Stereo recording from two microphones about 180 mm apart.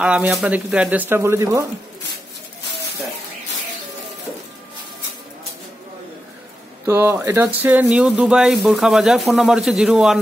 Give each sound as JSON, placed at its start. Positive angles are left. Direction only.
{"t": 0.0, "sound": "speech", "side_deg": -5}
{"t": 6.9, "sound": "speech", "side_deg": -10}